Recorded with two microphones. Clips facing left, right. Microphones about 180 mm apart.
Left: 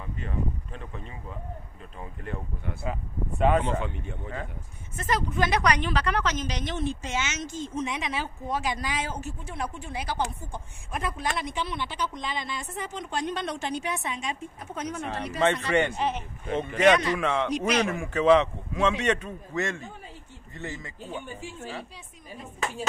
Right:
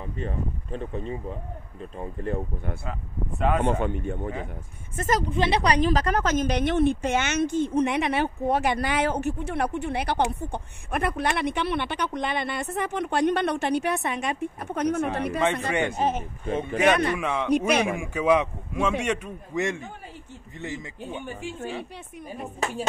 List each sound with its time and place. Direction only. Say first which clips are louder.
0.0 s speech: right 2 dB; 35° right (ahead or behind)
2.0 s speech: right 7 dB; 45° right (ahead or behind)
2.8 s speech: left 1 dB; centre (ahead or behind)
3.8 s speech: right 8 dB; 50° right (ahead or behind)
5.3 s speech: even; 30° right (ahead or behind); by 16.5 s 45° right (ahead or behind)
16.5 s a man's voice: left 1 dB; 10° right (ahead or behind)